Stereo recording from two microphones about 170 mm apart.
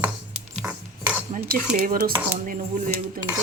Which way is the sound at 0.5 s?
5° right (ahead or behind).